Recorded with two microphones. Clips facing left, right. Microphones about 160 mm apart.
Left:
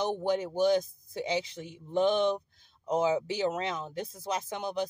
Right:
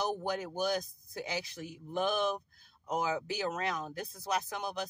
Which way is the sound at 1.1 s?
25° left (ahead or behind).